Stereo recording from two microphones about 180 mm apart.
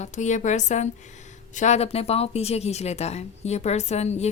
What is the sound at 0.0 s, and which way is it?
Speech, 40° left (ahead or behind).